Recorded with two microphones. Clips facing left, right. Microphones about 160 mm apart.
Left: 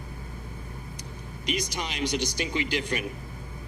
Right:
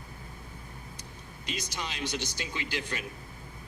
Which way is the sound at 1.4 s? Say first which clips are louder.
Left 6 dB; 15° left (ahead or behind).